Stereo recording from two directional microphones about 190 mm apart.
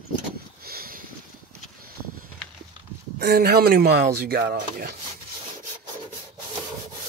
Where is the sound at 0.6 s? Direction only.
50° right (ahead or behind).